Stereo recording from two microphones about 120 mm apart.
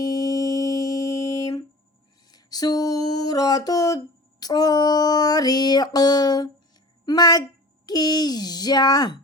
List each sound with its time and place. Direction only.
0.0 s music: 30° left (ahead or behind)
2.3 s a sound: 35° left (ahead or behind)
7.0 s a woman's voice: 35° left (ahead or behind)